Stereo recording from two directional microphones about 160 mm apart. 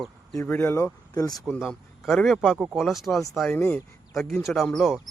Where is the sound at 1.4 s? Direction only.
Centre (ahead or behind).